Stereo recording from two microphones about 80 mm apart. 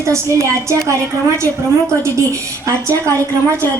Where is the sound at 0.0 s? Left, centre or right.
Right.